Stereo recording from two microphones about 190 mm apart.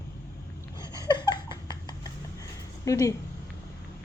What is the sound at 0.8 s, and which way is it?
Laughter, 20° left (ahead or behind).